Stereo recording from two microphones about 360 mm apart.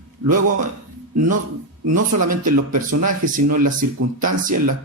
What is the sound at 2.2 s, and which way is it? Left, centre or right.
Speech, right.